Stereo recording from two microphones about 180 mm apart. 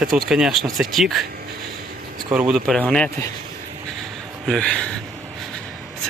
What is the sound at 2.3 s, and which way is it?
Speech, 5° right (ahead or behind).